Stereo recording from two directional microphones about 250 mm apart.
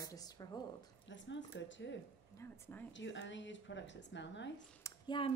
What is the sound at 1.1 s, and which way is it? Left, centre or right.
Speech, left.